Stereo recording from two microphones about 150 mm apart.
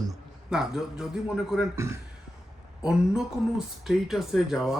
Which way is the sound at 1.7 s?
20° right (ahead or behind).